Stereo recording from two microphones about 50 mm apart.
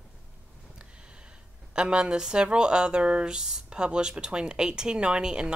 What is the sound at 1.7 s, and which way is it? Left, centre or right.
A woman's voice, centre.